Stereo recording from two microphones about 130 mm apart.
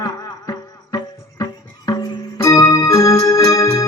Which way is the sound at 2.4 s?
25° left (ahead or behind).